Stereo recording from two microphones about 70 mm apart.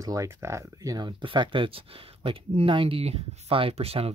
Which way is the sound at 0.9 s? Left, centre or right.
Right.